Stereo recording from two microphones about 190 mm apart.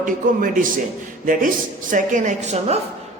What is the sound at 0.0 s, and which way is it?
Speech, 45° right (ahead or behind).